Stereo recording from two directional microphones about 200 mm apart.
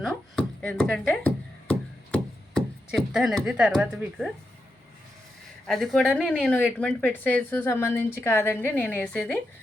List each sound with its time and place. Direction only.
0.0 s a sound: 5° left (ahead or behind)
2.1 s speech: 5° left (ahead or behind)
5.6 s a woman's voice: centre (ahead or behind)